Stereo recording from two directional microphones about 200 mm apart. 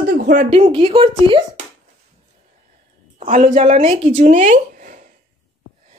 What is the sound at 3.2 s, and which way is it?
Speech, 40° right (ahead or behind).